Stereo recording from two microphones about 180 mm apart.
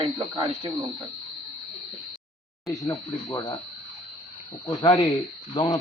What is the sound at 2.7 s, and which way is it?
Speech, 20° left (ahead or behind).